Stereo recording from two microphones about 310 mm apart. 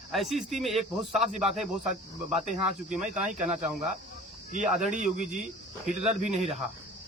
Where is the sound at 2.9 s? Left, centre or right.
Centre.